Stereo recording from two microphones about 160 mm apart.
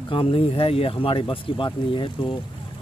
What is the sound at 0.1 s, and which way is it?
Speech, 35° left (ahead or behind).